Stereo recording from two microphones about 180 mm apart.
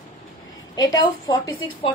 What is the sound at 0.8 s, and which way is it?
A woman's voice, 20° left (ahead or behind).